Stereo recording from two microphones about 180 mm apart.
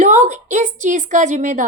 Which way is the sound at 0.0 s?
40° right (ahead or behind).